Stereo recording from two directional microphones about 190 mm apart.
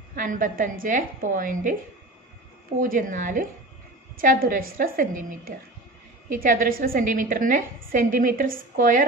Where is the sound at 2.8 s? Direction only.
45° right (ahead or behind).